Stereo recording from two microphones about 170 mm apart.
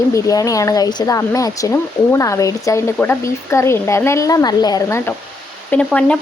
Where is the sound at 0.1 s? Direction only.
20° left (ahead or behind).